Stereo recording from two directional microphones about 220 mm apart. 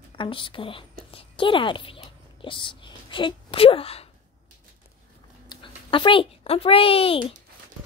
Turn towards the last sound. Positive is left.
turn(degrees=25)  # may be behind; listen again after turning